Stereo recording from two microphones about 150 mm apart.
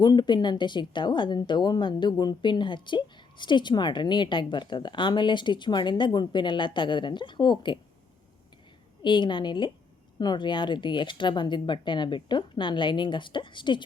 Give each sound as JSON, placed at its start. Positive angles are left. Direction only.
{"t": 0.0, "sound": "a woman's voice", "side_deg": 30}
{"t": 9.0, "sound": "a woman's voice", "side_deg": 30}